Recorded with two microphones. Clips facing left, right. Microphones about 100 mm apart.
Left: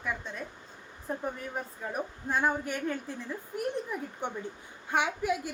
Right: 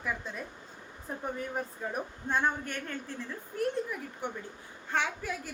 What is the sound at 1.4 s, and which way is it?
A woman's voice, centre (ahead or behind).